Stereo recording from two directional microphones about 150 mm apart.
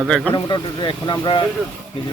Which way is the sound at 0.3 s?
30° left (ahead or behind).